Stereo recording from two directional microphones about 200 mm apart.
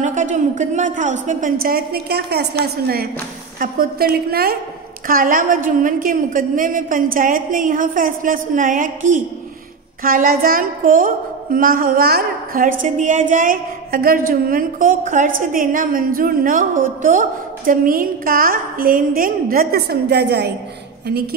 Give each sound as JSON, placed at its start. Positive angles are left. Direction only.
{"t": 0.0, "sound": "a woman's voice", "side_deg": -40}
{"t": 10.0, "sound": "a woman's voice", "side_deg": -45}